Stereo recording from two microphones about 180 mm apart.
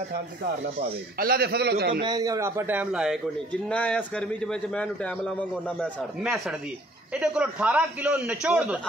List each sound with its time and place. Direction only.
1.2 s a man's voice: 60° right (ahead or behind)
2.0 s a man's voice: 20° right (ahead or behind); by 3.2 s 5° right (ahead or behind)
3.7 s a man's voice: 5° left (ahead or behind)